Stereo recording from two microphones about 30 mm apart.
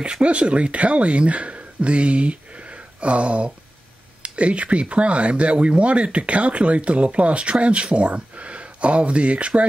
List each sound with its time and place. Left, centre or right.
0.2 s speech: right